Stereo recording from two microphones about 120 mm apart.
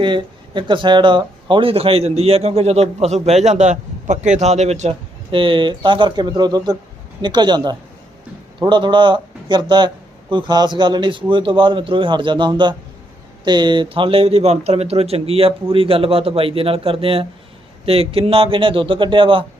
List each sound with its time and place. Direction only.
0.0 s a man's voice: 40° right (ahead or behind)